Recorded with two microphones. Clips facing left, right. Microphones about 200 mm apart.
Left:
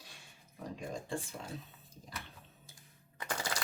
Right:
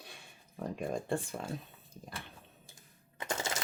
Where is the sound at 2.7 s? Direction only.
25° right (ahead or behind).